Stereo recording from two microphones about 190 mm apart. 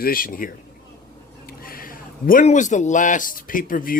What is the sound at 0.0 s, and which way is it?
A man's voice, 50° left (ahead or behind).